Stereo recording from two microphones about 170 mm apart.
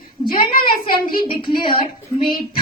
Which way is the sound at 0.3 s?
60° left (ahead or behind).